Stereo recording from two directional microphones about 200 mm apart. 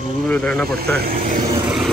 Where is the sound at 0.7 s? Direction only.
50° right (ahead or behind).